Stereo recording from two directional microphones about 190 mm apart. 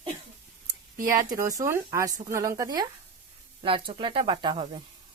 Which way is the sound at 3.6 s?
30° right (ahead or behind).